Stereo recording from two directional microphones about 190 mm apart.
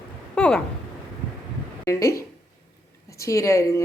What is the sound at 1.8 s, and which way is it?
A woman's voice, 15° left (ahead or behind).